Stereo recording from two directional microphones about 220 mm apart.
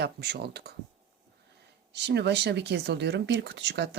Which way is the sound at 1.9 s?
50° right (ahead or behind).